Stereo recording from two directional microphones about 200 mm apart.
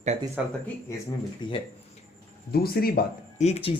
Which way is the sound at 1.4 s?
20° left (ahead or behind).